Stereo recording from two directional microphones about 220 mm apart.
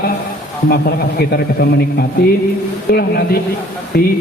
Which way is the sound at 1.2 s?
45° left (ahead or behind).